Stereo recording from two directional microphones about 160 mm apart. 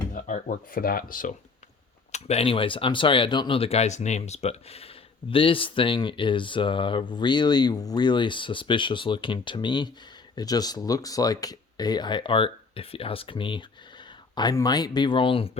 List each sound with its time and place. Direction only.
0.1 s speech: 50° left (ahead or behind)
2.1 s speech: 40° left (ahead or behind)